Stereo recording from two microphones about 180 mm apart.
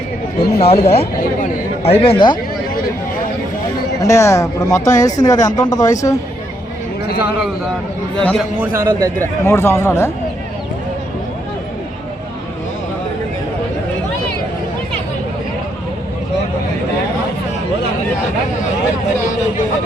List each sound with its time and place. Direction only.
0.3 s speech: 60° left (ahead or behind)
0.6 s speech: 35° left (ahead or behind)
4.0 s speech: 15° left (ahead or behind)
8.1 s speech: 5° left (ahead or behind)
8.5 s a man's voice: 10° right (ahead or behind)
9.2 s speech: 15° left (ahead or behind)